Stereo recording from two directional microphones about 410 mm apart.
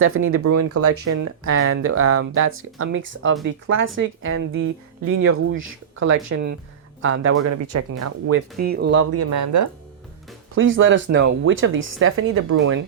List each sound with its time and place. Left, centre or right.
0.0 s speech: right
8.5 s speech: right
9.3 s speech: right
10.5 s speech: right